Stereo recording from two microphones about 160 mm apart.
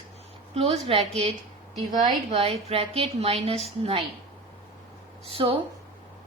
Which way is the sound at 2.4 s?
40° right (ahead or behind).